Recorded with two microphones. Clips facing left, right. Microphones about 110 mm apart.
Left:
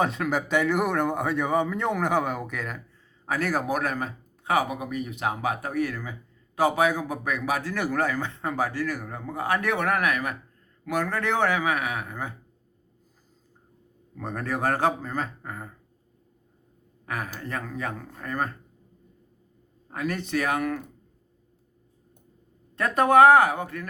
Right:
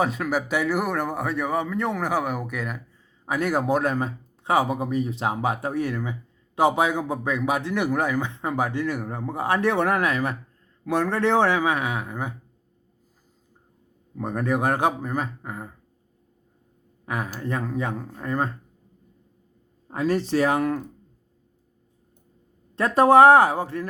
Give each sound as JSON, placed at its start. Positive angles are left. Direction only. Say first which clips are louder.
{"t": 0.0, "sound": "a man's voice", "louder": "right 1 dB", "side_deg": -5}
{"t": 14.2, "sound": "speech", "louder": "right 4 dB", "side_deg": -15}
{"t": 17.1, "sound": "a man's voice", "louder": "right 4 dB", "side_deg": -20}
{"t": 19.9, "sound": "a man's voice", "louder": "right 6 dB", "side_deg": -30}
{"t": 22.7, "sound": "a man's voice", "louder": "right 4 dB", "side_deg": -30}